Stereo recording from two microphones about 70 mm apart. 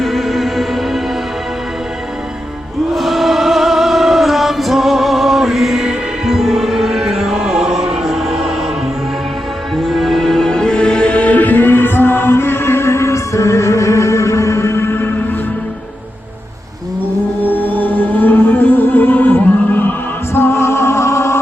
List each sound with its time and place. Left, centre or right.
0.0 s music: centre
2.9 s music: centre
9.7 s music: centre; by 15.4 s left
17.5 s music: left